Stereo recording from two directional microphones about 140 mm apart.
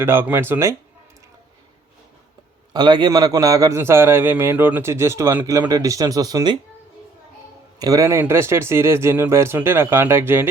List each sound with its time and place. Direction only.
0.0 s speech: 15° right (ahead or behind)
2.7 s a man's voice: 30° right (ahead or behind)
7.8 s speech: 25° right (ahead or behind)